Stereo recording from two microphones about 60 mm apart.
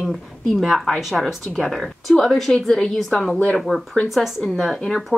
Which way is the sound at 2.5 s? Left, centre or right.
Centre.